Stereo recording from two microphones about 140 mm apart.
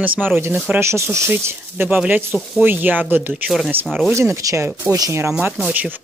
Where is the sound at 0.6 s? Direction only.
20° right (ahead or behind).